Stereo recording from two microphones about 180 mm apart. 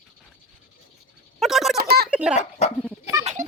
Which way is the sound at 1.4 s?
Centre (ahead or behind).